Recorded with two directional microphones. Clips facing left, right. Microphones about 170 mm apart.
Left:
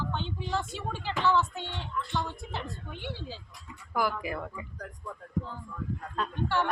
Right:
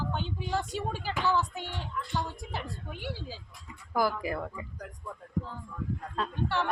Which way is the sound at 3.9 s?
35° right (ahead or behind).